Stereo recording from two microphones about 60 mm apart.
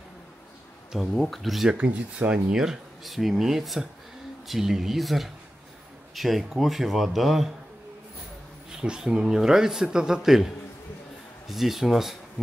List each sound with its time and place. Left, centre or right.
1.1 s speech: centre
1.7 s speech: right
2.5 s speech: centre
8.7 s a man's voice: centre